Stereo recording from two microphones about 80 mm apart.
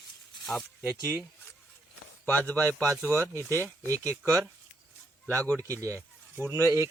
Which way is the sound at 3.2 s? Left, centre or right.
Right.